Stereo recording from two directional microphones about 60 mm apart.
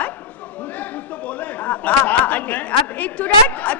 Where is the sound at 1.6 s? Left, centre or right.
Left.